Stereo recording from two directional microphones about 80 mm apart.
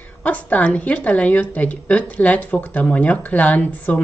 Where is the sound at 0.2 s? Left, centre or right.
Centre.